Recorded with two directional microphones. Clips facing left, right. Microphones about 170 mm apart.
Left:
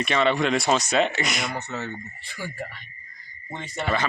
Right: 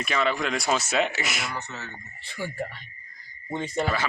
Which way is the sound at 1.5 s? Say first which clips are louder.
Left 5 dB; 70° left (ahead or behind).